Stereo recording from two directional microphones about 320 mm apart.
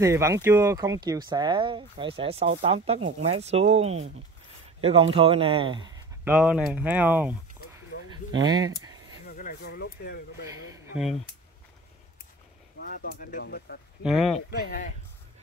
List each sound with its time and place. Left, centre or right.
0.0 s speech: centre
5.1 s speech: centre
7.6 s a sound: centre
8.1 s speech: centre
9.2 s speech: left
10.7 s a sound: centre
12.7 s speech: left
14.0 s speech: centre
14.5 s speech: left